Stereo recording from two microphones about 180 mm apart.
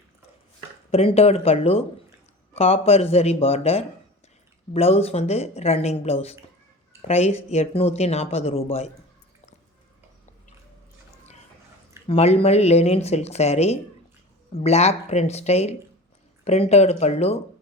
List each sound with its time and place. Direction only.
0.9 s speech: 35° left (ahead or behind)
12.0 s speech: 35° left (ahead or behind)